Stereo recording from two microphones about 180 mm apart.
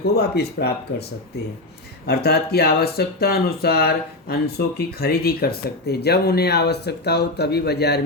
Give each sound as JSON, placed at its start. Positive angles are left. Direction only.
{"t": 0.0, "sound": "speech", "side_deg": 65}
{"t": 2.0, "sound": "speech", "side_deg": 60}